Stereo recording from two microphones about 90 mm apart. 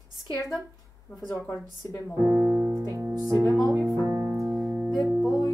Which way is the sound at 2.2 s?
20° right (ahead or behind).